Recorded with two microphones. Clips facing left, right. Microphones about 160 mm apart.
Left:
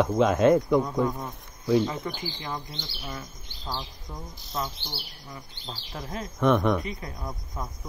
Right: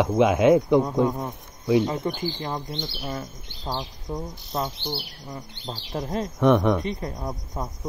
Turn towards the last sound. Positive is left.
turn(degrees=-35)  # may be behind; listen again after turning